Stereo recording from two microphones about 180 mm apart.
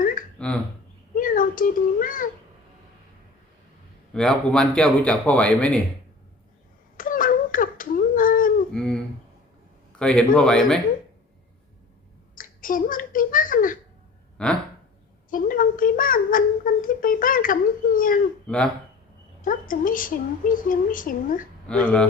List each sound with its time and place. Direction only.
0.0 s a sound: 50° left (ahead or behind)
0.3 s speech: 5° left (ahead or behind)
1.1 s speech: 50° left (ahead or behind)
4.1 s a man's voice: 5° left (ahead or behind)
6.9 s a sound: 50° left (ahead or behind)
8.7 s a sound: 5° left (ahead or behind)
10.0 s a man's voice: 5° left (ahead or behind)
12.3 s speech: 50° left (ahead or behind)
14.4 s a man's voice: 5° left (ahead or behind)
15.3 s speech: 50° left (ahead or behind)
18.4 s a man's voice: 5° left (ahead or behind)
19.4 s speech: 50° left (ahead or behind)
21.7 s a man's voice: 5° left (ahead or behind)